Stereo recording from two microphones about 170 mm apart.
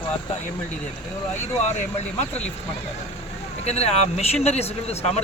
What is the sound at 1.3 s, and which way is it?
Speech, 45° left (ahead or behind).